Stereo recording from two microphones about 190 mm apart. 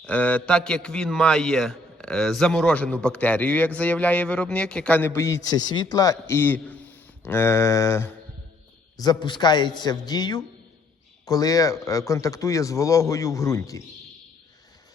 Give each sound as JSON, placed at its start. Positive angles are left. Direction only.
{"t": 0.0, "sound": "a man's voice", "side_deg": 10}